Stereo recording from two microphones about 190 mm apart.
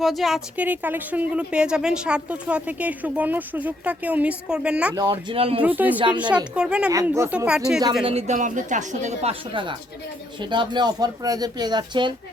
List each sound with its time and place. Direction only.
0.0 s speech: centre (ahead or behind)
5.3 s speech: 30° right (ahead or behind)
5.6 s speech: 10° right (ahead or behind)
8.0 s speech: 35° right (ahead or behind)
9.5 s speech: 25° right (ahead or behind)